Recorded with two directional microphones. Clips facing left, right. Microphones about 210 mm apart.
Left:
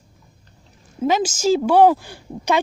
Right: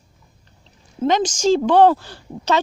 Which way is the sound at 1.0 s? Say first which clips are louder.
Right 1 dB; 5° left (ahead or behind).